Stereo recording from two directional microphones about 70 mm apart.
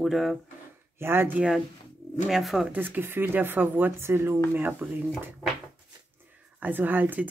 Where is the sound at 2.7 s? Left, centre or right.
Right.